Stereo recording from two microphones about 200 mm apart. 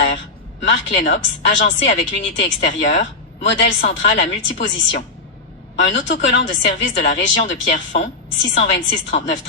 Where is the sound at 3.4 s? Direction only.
50° left (ahead or behind).